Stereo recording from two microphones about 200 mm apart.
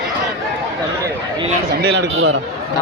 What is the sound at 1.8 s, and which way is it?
Speech, 65° right (ahead or behind).